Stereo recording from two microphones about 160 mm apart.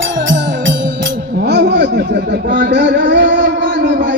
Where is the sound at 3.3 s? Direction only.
75° right (ahead or behind); by 4.2 s 60° right (ahead or behind).